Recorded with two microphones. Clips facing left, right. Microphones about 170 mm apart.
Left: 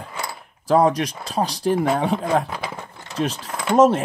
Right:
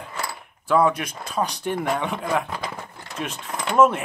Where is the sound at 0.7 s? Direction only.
35° left (ahead or behind).